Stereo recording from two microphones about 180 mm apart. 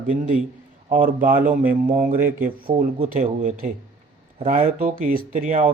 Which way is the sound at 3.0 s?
45° right (ahead or behind).